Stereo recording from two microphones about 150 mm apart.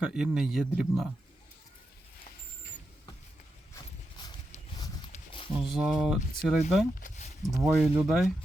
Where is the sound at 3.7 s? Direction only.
30° left (ahead or behind).